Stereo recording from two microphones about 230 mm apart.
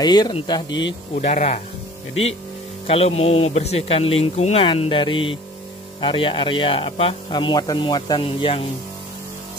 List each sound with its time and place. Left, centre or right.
0.0 s speech: centre
1.1 s speech: left
2.9 s speech: left